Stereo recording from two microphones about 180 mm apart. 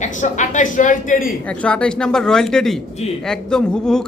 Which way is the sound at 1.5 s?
5° left (ahead or behind).